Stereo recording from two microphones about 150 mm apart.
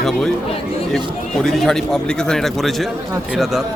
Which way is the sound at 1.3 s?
Centre (ahead or behind).